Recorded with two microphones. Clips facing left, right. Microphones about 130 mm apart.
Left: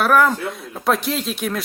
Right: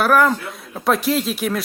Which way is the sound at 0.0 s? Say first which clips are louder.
Even; centre (ahead or behind).